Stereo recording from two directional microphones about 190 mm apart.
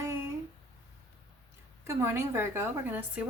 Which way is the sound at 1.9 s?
15° right (ahead or behind).